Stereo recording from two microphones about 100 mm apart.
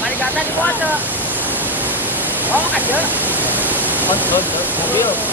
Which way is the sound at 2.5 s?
15° right (ahead or behind).